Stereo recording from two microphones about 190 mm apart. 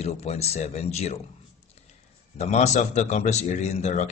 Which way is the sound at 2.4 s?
35° left (ahead or behind).